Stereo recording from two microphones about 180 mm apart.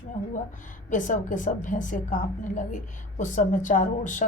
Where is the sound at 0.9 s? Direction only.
45° left (ahead or behind).